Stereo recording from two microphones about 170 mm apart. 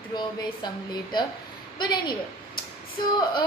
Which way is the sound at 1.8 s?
25° left (ahead or behind).